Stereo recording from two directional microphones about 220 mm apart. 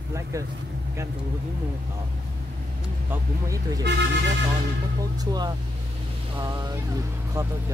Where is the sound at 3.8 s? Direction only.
50° right (ahead or behind).